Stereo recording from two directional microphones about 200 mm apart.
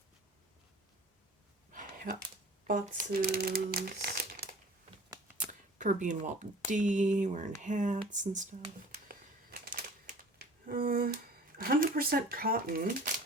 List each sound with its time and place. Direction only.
1.7 s a sound: 40° right (ahead or behind)
2.6 s speech: 40° right (ahead or behind)
5.5 s speech: 40° right (ahead or behind)